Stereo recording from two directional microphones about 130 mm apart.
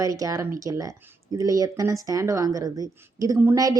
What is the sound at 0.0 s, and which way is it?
A woman's voice, 25° right (ahead or behind).